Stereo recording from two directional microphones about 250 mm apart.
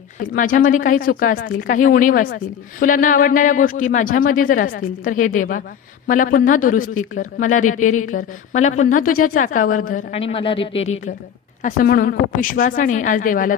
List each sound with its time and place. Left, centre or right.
0.2 s a woman's voice: left